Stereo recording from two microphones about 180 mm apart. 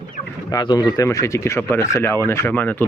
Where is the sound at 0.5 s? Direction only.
25° left (ahead or behind).